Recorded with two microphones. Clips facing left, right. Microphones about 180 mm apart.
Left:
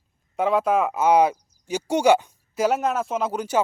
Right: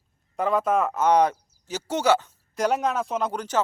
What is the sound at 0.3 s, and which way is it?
A man's voice, centre (ahead or behind).